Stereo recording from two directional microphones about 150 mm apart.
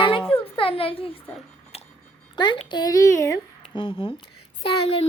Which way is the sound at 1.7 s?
40° left (ahead or behind).